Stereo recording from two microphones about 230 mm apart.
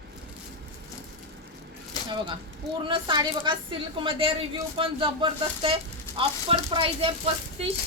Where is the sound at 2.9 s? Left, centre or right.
Right.